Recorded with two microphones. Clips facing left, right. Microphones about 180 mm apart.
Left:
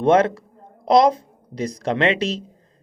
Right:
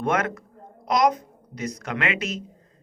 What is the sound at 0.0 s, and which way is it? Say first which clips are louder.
A man's voice: left 9 dB; 30° left (ahead or behind).